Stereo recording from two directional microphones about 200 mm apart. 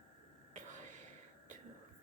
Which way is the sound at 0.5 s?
40° right (ahead or behind).